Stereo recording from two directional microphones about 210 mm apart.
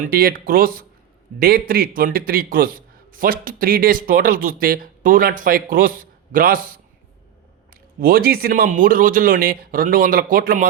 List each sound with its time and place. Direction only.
0.0 s a man's voice: 45° right (ahead or behind)